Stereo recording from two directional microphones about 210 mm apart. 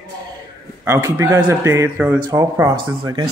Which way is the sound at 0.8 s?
15° right (ahead or behind).